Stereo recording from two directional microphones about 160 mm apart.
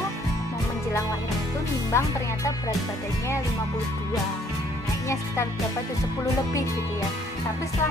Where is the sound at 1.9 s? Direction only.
20° left (ahead or behind).